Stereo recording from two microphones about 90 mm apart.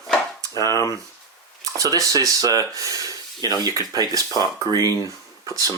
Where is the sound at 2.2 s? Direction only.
40° right (ahead or behind).